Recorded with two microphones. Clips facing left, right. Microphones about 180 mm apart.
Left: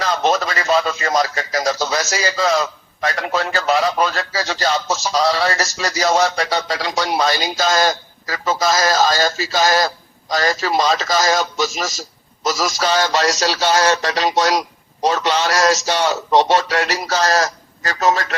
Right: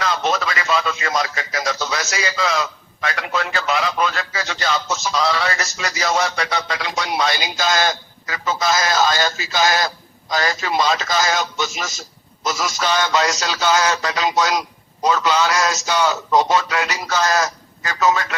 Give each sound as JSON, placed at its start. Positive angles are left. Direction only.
{"t": 0.0, "sound": "speech", "side_deg": 35}